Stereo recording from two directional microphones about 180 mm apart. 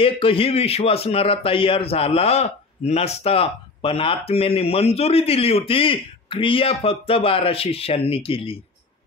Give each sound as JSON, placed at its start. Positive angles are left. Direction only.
{"t": 0.0, "sound": "a man's voice", "side_deg": 30}